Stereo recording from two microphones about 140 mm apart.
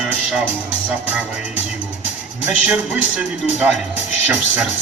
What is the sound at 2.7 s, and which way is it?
Speech, 10° right (ahead or behind).